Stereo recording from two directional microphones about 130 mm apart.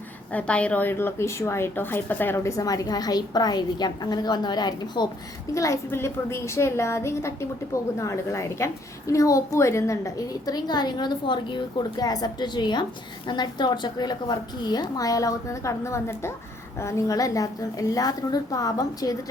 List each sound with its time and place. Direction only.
0.3 s a woman's voice: 10° left (ahead or behind); by 19.1 s 30° left (ahead or behind)